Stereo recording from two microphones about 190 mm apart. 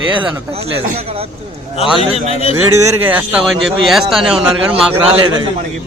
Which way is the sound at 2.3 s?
35° left (ahead or behind).